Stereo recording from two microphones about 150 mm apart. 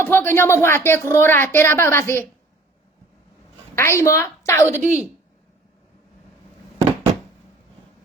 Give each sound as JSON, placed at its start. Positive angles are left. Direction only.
{"t": 0.0, "sound": "a woman's voice", "side_deg": 15}
{"t": 3.8, "sound": "a woman's voice", "side_deg": 20}
{"t": 4.7, "sound": "a woman's voice", "side_deg": -55}